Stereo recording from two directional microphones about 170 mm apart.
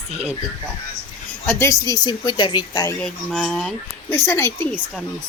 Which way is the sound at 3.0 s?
5° left (ahead or behind).